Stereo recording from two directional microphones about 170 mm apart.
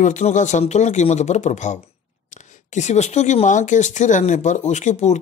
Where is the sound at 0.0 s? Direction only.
45° left (ahead or behind).